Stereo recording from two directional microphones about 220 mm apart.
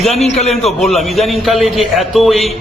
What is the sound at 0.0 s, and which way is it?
Speech, centre (ahead or behind).